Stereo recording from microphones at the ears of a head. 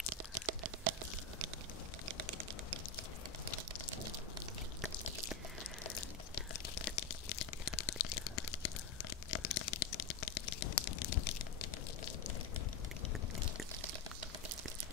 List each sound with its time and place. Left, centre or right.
0.3 s tearing: right
2.0 s typing: right
5.9 s tearing: left
9.3 s a sound: left